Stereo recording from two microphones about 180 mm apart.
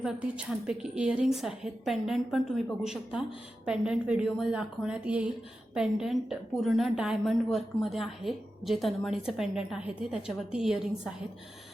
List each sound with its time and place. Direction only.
0.0 s a woman's voice: 5° right (ahead or behind)